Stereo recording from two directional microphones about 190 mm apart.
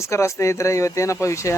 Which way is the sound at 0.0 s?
15° left (ahead or behind).